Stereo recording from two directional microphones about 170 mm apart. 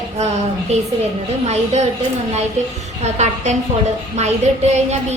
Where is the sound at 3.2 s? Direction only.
40° right (ahead or behind).